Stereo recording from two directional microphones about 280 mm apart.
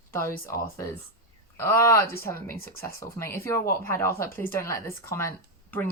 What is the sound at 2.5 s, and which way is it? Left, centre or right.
Speech, left.